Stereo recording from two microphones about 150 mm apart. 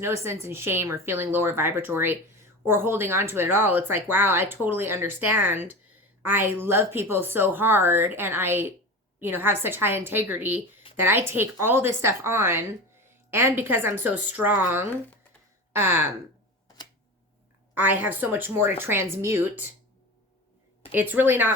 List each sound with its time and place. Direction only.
0.0 s speech: 20° right (ahead or behind)
17.7 s speech: 10° right (ahead or behind)
20.9 s speech: 10° right (ahead or behind)